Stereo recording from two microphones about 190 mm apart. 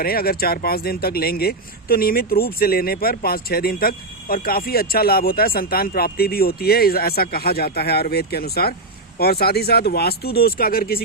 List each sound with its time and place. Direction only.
0.0 s speech: 50° left (ahead or behind)